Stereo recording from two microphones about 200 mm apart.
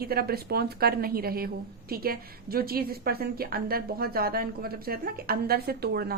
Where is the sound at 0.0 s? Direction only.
50° right (ahead or behind).